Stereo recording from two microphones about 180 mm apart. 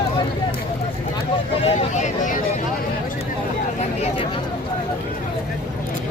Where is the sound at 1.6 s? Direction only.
40° left (ahead or behind).